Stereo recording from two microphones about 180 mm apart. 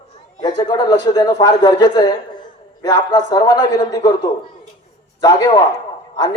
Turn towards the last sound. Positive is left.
turn(degrees=25)  # may be behind; listen again after turning